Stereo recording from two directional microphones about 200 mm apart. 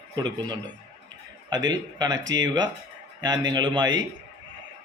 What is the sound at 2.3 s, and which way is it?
Speech, 65° right (ahead or behind).